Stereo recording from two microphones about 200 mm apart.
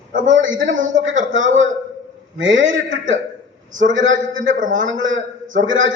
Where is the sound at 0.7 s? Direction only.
40° right (ahead or behind).